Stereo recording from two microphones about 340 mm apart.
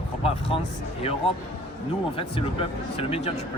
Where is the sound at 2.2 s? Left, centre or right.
Centre.